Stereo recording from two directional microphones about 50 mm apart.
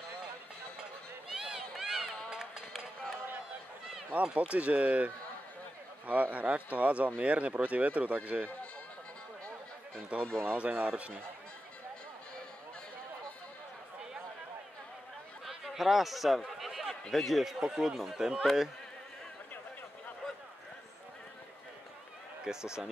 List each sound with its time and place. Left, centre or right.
1.3 s run: centre
4.1 s speech: right
10.1 s speech: right
15.4 s a sound: centre
17.1 s speech: centre
22.4 s speech: centre